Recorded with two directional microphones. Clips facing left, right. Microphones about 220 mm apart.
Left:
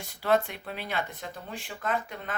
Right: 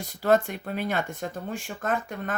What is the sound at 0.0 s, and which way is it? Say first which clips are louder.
Speech: right 4 dB; 45° right (ahead or behind).